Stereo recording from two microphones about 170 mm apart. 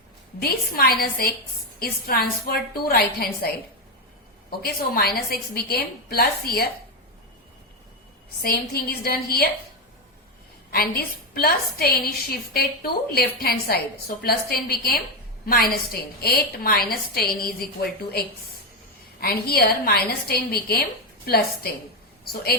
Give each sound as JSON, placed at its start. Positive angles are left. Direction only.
{"t": 0.3, "sound": "a woman's voice", "side_deg": 65}
{"t": 4.6, "sound": "a woman's voice", "side_deg": 65}
{"t": 8.4, "sound": "a woman's voice", "side_deg": 65}
{"t": 10.7, "sound": "a woman's voice", "side_deg": 65}
{"t": 19.2, "sound": "a woman's voice", "side_deg": 65}